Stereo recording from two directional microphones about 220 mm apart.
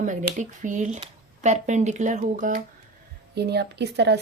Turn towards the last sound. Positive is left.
turn(degrees=-50)  # may be behind; listen again after turning